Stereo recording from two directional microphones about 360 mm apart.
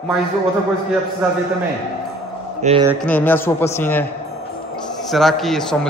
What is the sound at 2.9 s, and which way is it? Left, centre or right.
Speech, centre.